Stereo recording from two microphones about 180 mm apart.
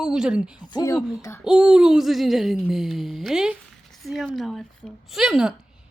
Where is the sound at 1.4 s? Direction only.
5° right (ahead or behind).